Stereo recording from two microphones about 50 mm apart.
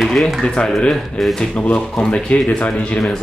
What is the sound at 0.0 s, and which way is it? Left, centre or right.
Speech, centre.